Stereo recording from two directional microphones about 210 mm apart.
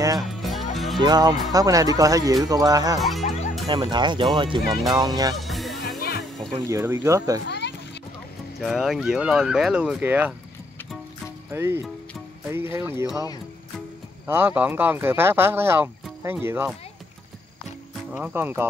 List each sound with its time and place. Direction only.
0.4 s music: centre (ahead or behind)
0.9 s speech: 20° right (ahead or behind)
3.0 s speech: centre (ahead or behind)
3.6 s speech: 20° right (ahead or behind)
5.3 s music: centre (ahead or behind)
5.9 s music: 50° left (ahead or behind)
6.7 s speech: 10° right (ahead or behind)
7.4 s a sound: 55° left (ahead or behind)
8.5 s speech: centre (ahead or behind)
11.5 s speech: 10° right (ahead or behind)
14.2 s speech: 10° right (ahead or behind)
18.1 s speech: 10° right (ahead or behind)